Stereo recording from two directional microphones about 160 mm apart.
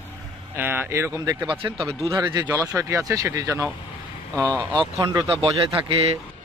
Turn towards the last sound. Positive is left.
turn(degrees=-35)  # may be behind; listen again after turning